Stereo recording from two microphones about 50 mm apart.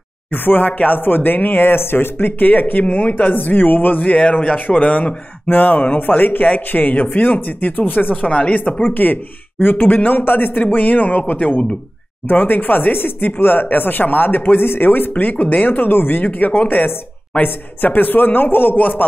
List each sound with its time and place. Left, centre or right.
0.3 s speech: left
8.8 s speech: left
16.3 s speech: left